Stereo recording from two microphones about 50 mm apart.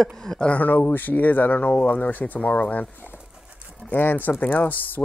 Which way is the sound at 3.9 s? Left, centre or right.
Left.